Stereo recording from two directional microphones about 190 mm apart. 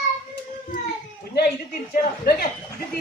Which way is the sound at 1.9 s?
50° left (ahead or behind).